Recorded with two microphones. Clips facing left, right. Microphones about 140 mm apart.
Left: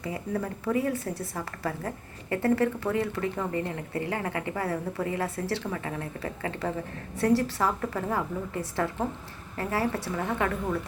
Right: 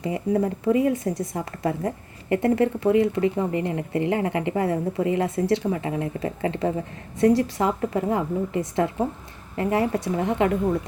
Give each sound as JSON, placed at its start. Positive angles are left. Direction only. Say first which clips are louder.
{"t": 0.0, "sound": "speech", "louder": "right 8 dB", "side_deg": -25}